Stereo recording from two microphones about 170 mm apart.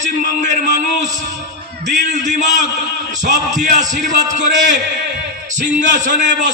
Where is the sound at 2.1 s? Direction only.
45° right (ahead or behind).